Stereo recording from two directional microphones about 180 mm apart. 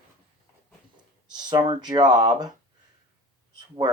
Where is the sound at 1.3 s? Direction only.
25° right (ahead or behind).